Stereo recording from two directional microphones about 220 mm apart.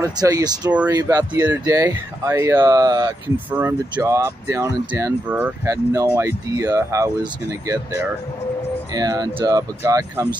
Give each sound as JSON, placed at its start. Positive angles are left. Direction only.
{"t": 0.0, "sound": "speech", "side_deg": -15}